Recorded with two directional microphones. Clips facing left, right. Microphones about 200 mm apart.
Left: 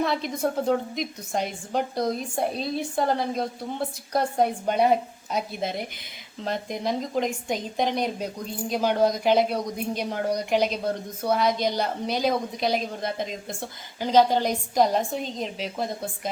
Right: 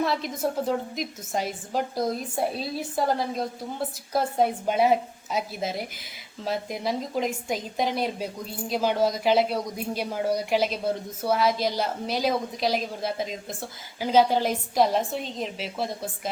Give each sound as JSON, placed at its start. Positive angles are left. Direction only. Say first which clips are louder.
{"t": 0.0, "sound": "a woman's voice", "louder": "left 1 dB", "side_deg": 0}